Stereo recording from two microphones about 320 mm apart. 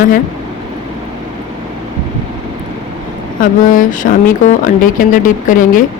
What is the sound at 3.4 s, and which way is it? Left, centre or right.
Speech, left.